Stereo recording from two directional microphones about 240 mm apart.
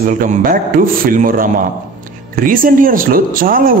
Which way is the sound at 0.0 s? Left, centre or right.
Right.